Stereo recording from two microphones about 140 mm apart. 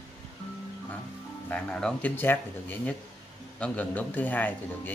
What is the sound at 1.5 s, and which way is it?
Speech, 10° left (ahead or behind).